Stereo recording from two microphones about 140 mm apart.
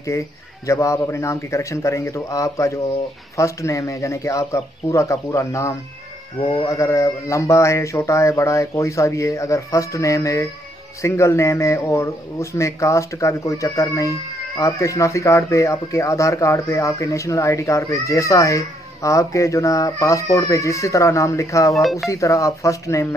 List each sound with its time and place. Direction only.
0.1 s speech: 20° left (ahead or behind)